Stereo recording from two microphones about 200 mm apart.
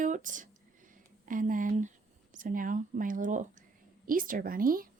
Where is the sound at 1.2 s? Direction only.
40° right (ahead or behind).